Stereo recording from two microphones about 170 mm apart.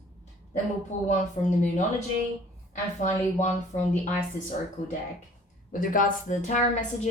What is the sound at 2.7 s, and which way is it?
A woman's voice, 45° left (ahead or behind).